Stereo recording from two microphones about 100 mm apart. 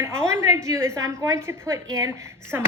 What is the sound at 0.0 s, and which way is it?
A woman's voice, 25° right (ahead or behind).